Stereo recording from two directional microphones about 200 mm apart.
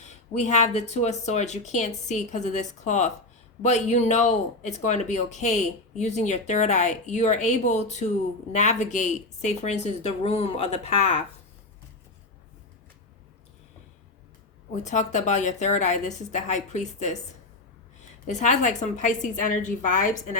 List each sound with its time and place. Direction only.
0.0 s speech: 35° left (ahead or behind)
14.8 s speech: 35° left (ahead or behind)